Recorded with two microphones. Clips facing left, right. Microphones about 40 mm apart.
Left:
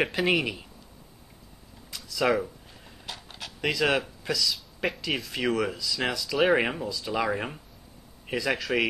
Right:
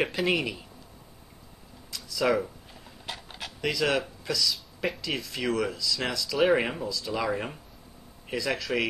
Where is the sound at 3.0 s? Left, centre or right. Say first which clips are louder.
Right 2 dB; centre.